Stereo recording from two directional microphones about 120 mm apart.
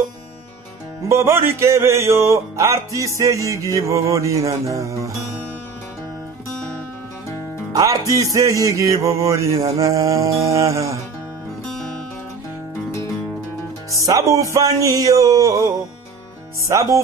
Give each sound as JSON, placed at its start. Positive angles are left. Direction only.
{"t": 1.0, "sound": "music", "side_deg": -25}
{"t": 7.7, "sound": "speech", "side_deg": -30}
{"t": 8.1, "sound": "music", "side_deg": -30}
{"t": 13.9, "sound": "music", "side_deg": -25}